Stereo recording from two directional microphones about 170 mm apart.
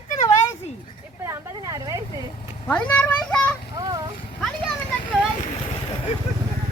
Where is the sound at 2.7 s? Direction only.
10° left (ahead or behind).